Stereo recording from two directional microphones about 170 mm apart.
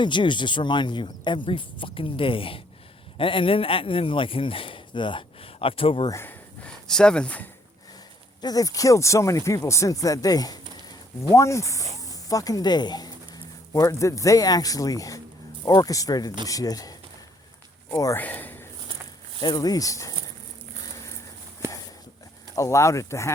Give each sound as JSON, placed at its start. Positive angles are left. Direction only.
{"t": 0.0, "sound": "a man's voice", "side_deg": 30}
{"t": 6.1, "sound": "speech", "side_deg": 15}
{"t": 8.4, "sound": "speech", "side_deg": 20}
{"t": 17.9, "sound": "speech", "side_deg": 15}
{"t": 19.4, "sound": "speech", "side_deg": 25}
{"t": 22.5, "sound": "speech", "side_deg": 15}